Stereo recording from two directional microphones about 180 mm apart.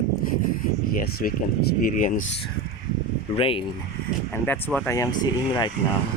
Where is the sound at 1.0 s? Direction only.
55° left (ahead or behind).